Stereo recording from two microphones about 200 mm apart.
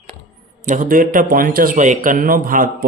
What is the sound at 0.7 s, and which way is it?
Speech, 40° right (ahead or behind).